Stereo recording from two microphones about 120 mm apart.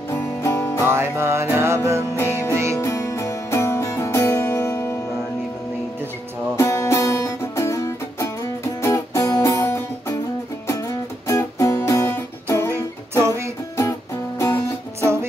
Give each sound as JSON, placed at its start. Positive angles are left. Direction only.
{"t": 0.1, "sound": "music", "side_deg": 25}
{"t": 0.8, "sound": "music", "side_deg": -20}
{"t": 2.1, "sound": "music", "side_deg": 20}
{"t": 2.5, "sound": "music", "side_deg": -25}
{"t": 2.8, "sound": "music", "side_deg": 25}
{"t": 6.5, "sound": "music", "side_deg": 25}
{"t": 14.4, "sound": "music", "side_deg": 25}